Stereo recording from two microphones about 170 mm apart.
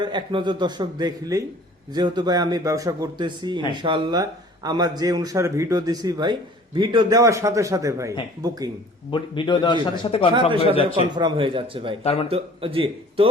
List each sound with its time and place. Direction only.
0.0 s a man's voice: 25° right (ahead or behind)
9.0 s speech: 30° left (ahead or behind)
11.1 s speech: 30° right (ahead or behind)
12.0 s speech: 35° left (ahead or behind)
12.3 s speech: 35° right (ahead or behind)